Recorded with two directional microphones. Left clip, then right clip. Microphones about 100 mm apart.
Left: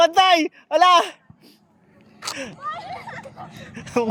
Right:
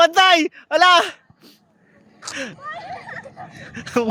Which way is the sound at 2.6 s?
10° left (ahead or behind).